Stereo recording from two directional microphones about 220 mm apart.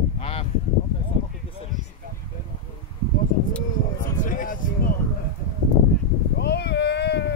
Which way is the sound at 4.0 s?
35° left (ahead or behind).